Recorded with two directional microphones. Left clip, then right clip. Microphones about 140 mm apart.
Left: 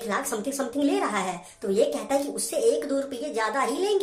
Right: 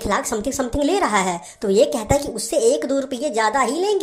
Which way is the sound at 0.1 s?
35° right (ahead or behind).